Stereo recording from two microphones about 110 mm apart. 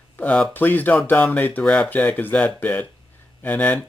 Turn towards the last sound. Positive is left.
turn(degrees=15)  # may be behind; listen again after turning